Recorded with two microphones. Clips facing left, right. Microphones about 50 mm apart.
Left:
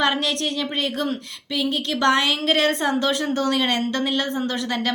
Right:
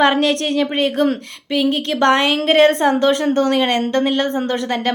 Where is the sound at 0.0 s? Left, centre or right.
Right.